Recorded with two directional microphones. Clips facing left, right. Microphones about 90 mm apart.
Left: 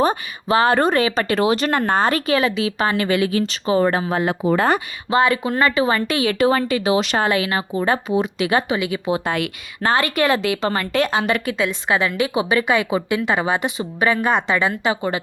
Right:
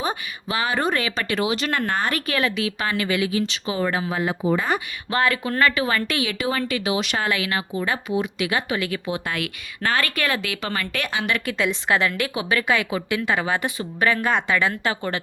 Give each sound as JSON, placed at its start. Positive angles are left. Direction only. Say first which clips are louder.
{"t": 0.4, "sound": "speech", "louder": "left 7 dB", "side_deg": 35}
{"t": 0.9, "sound": "speech", "louder": "left 6 dB", "side_deg": 30}
{"t": 4.2, "sound": "speech", "louder": "left 4 dB", "side_deg": 65}
{"t": 5.1, "sound": "a woman's voice", "louder": "left 4 dB", "side_deg": 25}
{"t": 6.2, "sound": "speech", "louder": "left 8 dB", "side_deg": 35}
{"t": 8.7, "sound": "a woman's voice", "louder": "left 4 dB", "side_deg": 15}
{"t": 9.0, "sound": "a woman's voice", "louder": "left 6 dB", "side_deg": 25}
{"t": 11.4, "sound": "a woman's voice", "louder": "left 2 dB", "side_deg": 10}